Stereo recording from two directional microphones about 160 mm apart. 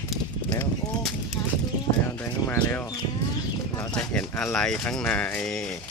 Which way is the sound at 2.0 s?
15° left (ahead or behind).